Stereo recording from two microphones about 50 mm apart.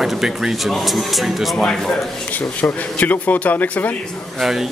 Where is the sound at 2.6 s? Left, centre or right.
Left.